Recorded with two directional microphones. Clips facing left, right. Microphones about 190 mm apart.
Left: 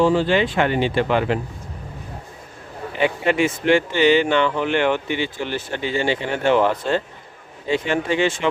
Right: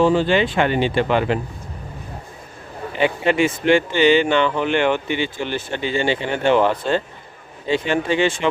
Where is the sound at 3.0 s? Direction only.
25° right (ahead or behind).